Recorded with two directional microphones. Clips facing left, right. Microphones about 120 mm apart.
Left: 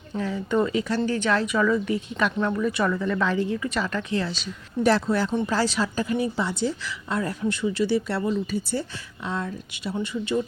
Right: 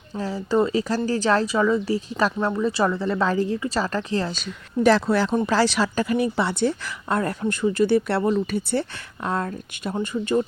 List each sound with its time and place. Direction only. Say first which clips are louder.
0.2 s a woman's voice: right 2 dB; 35° right (ahead or behind)
1.5 s a woman's voice: right 2 dB; 25° right (ahead or behind); by 4.4 s 40° right (ahead or behind)
4.8 s a woman's voice: right 3 dB; 90° right; by 10.4 s 45° right (ahead or behind)